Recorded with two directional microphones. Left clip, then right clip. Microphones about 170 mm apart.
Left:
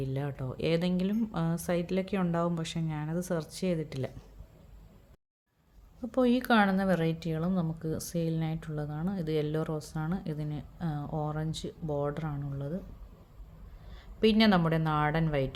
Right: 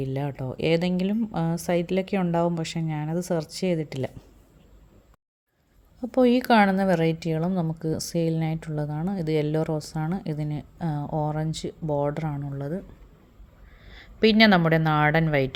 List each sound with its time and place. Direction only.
0.0 s a woman's voice: 30° right (ahead or behind)
6.0 s a woman's voice: 35° right (ahead or behind)
13.9 s a woman's voice: 30° right (ahead or behind)